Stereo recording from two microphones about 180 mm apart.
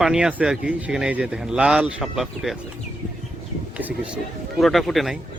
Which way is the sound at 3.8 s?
10° right (ahead or behind).